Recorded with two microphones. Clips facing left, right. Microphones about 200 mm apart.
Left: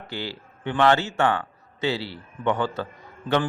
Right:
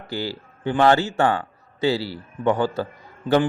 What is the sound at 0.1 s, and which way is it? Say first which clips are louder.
A man's voice: right 5 dB; 40° right (ahead or behind).